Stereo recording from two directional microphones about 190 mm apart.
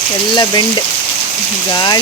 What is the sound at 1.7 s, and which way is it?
Speech, 20° left (ahead or behind).